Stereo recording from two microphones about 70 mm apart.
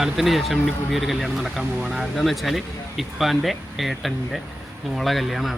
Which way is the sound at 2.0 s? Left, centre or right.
Centre.